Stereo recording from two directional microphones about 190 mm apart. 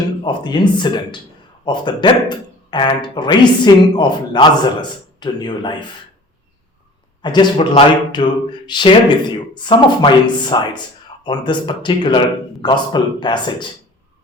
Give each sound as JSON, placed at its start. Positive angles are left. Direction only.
{"t": 0.3, "sound": "speech", "side_deg": 25}
{"t": 7.2, "sound": "speech", "side_deg": 25}